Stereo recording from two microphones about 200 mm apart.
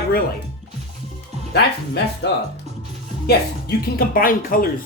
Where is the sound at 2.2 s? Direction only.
55° left (ahead or behind).